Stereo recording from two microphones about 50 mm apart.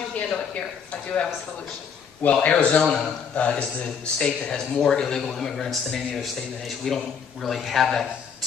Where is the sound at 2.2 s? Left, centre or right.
Left.